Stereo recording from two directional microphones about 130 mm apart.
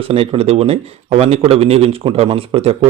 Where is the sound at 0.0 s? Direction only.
45° right (ahead or behind).